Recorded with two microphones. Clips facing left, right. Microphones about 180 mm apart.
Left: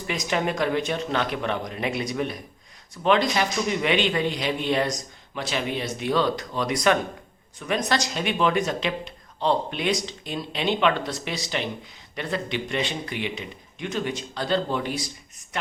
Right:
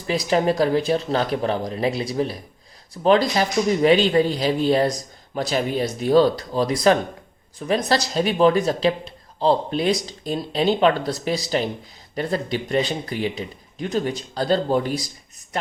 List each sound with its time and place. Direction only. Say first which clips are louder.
0.1 s speech: right 6 dB; 35° right (ahead or behind)